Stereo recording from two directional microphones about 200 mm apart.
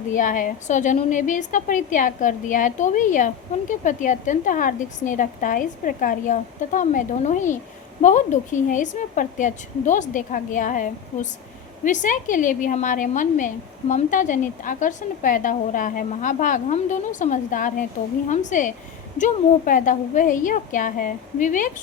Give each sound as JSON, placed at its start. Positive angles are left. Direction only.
{"t": 0.1, "sound": "a woman's voice", "side_deg": 40}